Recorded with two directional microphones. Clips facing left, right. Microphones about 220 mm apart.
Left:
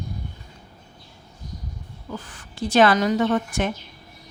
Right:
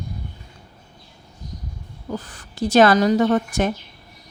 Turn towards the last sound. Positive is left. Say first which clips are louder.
# right 3 dB
turn(degrees=-40)  # may be behind; listen again after turning